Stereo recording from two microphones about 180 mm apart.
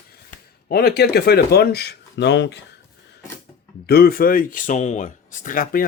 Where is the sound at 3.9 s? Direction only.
60° left (ahead or behind).